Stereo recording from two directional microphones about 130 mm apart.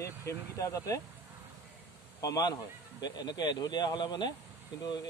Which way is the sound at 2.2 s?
30° left (ahead or behind).